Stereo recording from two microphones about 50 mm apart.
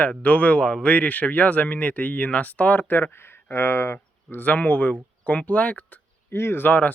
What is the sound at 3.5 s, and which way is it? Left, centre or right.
Speech, left.